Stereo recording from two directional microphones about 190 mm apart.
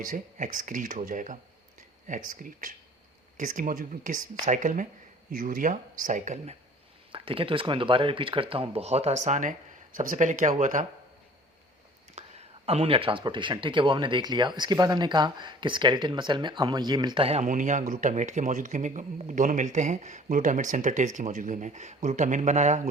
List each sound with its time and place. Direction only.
0.0 s speech: 45° right (ahead or behind)
12.1 s speech: 35° right (ahead or behind)